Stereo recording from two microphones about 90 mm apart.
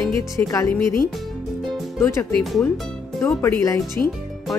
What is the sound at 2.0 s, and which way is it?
Speech, 30° left (ahead or behind).